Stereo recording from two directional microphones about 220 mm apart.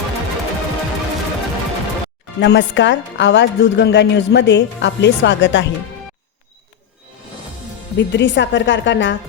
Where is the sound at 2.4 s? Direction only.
55° left (ahead or behind).